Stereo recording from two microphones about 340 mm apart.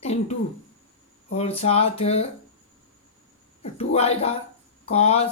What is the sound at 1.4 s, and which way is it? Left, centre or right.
Speech, centre.